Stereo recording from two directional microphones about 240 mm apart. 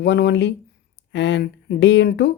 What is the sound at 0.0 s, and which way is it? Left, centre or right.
Speech, left.